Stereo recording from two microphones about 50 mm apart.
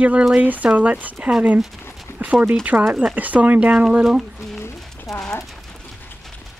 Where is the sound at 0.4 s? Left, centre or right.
Right.